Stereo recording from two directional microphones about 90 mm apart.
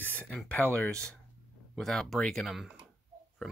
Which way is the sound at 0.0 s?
15° left (ahead or behind).